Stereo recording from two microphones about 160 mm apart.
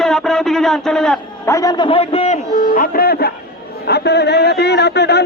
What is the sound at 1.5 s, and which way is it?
Speech, 20° left (ahead or behind).